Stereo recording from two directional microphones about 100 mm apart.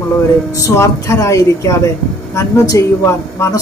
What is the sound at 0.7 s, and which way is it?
A woman's voice, 30° left (ahead or behind).